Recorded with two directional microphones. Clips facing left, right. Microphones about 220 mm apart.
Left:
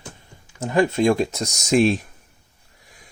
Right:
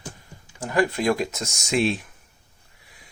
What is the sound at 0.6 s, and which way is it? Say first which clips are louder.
Speech: left 4 dB; 25° left (ahead or behind).